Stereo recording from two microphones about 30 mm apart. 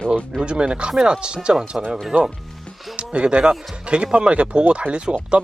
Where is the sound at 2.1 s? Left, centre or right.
Right.